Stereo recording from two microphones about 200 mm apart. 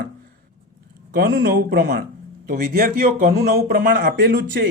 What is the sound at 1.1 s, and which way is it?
Speech, 50° right (ahead or behind).